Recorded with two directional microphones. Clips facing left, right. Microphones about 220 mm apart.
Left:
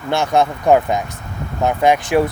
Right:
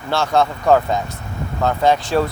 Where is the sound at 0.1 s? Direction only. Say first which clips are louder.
Left 1 dB; 20° left (ahead or behind).